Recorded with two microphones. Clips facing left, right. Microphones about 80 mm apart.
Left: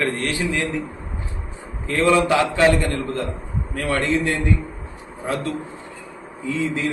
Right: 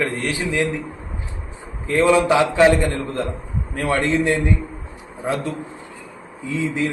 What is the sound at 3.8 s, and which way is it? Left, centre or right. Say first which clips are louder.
Speech: right 2 dB; right.